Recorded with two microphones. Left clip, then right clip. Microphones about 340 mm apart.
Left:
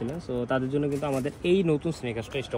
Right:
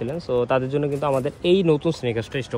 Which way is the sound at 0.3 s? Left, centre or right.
Right.